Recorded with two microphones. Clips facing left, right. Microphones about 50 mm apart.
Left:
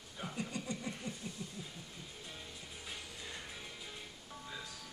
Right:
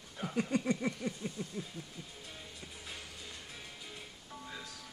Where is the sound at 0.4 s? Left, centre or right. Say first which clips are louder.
Right 10 dB; right.